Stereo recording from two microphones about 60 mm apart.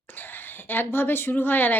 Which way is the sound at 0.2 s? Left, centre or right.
Left.